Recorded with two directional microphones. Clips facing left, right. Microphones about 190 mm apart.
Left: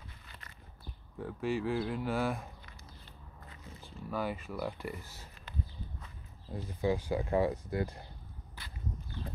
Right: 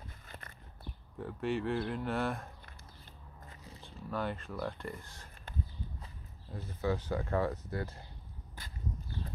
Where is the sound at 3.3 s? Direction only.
45° right (ahead or behind).